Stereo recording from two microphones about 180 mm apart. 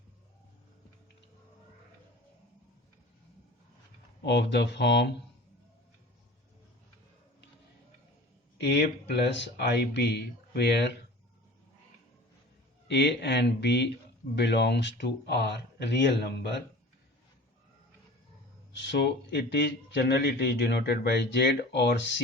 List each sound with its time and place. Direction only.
4.2 s speech: 70° left (ahead or behind)
8.5 s speech: 65° left (ahead or behind)
12.9 s speech: 70° left (ahead or behind)
18.7 s speech: 80° left